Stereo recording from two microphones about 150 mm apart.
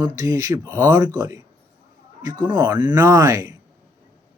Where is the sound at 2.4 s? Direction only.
30° right (ahead or behind).